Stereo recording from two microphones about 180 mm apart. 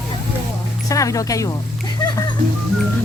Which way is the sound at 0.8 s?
20° left (ahead or behind).